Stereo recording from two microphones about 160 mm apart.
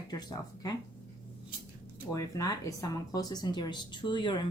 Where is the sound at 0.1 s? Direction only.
25° left (ahead or behind).